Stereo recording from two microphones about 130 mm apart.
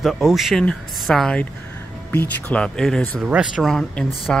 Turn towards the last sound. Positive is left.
turn(degrees=5)  # may be behind; listen again after turning